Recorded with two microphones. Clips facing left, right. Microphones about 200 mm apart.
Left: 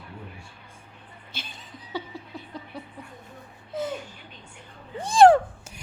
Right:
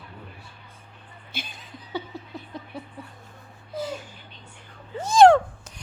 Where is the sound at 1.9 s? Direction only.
10° left (ahead or behind).